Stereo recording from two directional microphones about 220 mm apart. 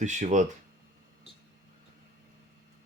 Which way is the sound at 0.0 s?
35° right (ahead or behind).